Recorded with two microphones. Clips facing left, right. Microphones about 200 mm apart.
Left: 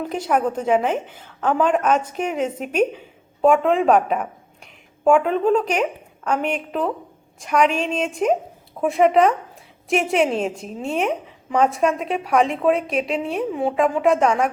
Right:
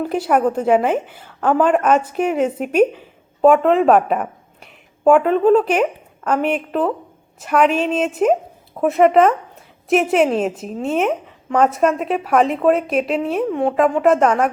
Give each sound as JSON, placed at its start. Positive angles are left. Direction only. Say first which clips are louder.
{"t": 0.0, "sound": "a woman's voice", "louder": "right 4 dB", "side_deg": -5}